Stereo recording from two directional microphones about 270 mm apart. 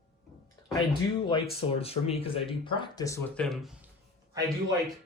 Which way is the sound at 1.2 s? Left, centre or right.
Centre.